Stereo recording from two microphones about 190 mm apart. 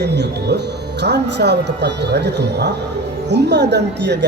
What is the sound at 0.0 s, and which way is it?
Speech, 60° right (ahead or behind).